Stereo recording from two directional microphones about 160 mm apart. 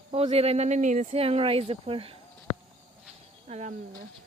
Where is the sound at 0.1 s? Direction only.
40° right (ahead or behind).